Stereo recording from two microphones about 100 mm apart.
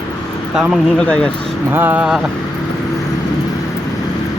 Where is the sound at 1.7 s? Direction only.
20° right (ahead or behind).